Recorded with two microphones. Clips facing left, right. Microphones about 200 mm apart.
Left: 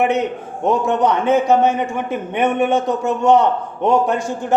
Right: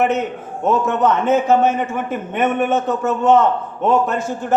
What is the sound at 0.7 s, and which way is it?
A man's voice, 15° left (ahead or behind).